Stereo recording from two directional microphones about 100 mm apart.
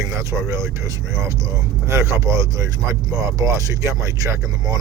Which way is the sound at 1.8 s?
30° right (ahead or behind).